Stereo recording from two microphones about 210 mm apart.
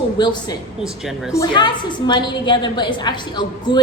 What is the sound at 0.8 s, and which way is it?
Speech, centre (ahead or behind).